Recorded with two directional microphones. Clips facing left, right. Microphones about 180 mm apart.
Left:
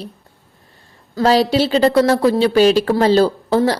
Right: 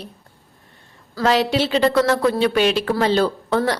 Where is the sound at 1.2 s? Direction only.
35° left (ahead or behind).